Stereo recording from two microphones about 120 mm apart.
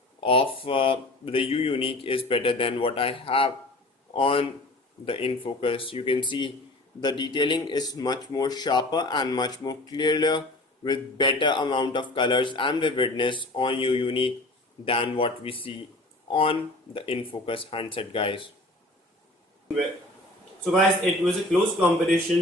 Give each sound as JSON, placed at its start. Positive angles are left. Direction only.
{"t": 0.2, "sound": "speech", "side_deg": 50}
{"t": 21.0, "sound": "speech", "side_deg": 5}